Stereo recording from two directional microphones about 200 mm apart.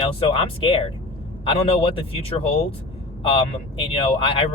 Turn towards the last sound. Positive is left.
turn(degrees=25)  # may be behind; listen again after turning